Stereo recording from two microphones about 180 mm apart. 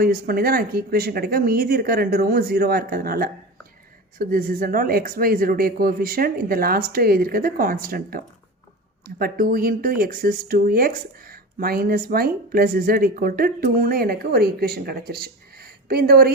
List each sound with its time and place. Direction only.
0.0 s speech: 55° right (ahead or behind)